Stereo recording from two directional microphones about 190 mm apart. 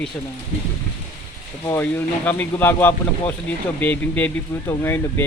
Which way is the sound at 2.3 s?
10° left (ahead or behind).